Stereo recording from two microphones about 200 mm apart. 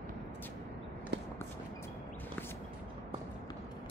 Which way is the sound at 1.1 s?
60° right (ahead or behind).